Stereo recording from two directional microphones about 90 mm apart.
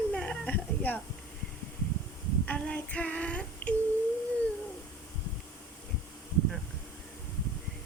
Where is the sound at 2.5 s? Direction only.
15° left (ahead or behind).